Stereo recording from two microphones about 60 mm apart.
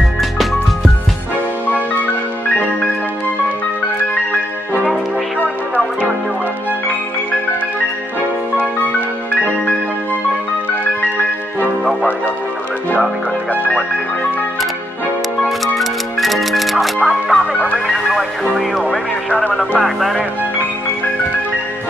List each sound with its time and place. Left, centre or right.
15.4 s music: centre
17.5 s music: left
17.7 s music: centre